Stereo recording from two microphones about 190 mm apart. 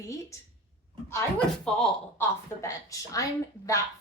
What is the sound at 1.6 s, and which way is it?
Speech, 5° left (ahead or behind).